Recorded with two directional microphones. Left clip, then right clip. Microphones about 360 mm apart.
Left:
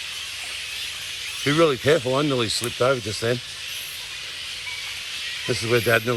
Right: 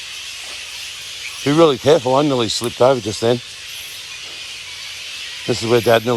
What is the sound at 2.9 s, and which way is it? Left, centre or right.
Speech, right.